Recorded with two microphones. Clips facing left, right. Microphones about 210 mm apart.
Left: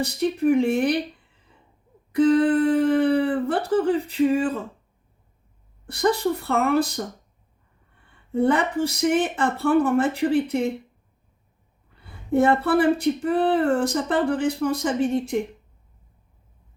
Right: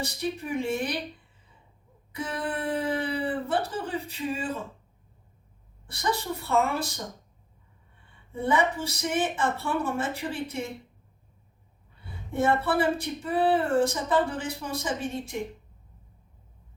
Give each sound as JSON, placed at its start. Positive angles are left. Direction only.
{"t": 0.0, "sound": "speech", "side_deg": 60}
{"t": 2.1, "sound": "speech", "side_deg": 65}
{"t": 5.9, "sound": "speech", "side_deg": 60}
{"t": 8.3, "sound": "speech", "side_deg": 60}
{"t": 13.0, "sound": "speech", "side_deg": 60}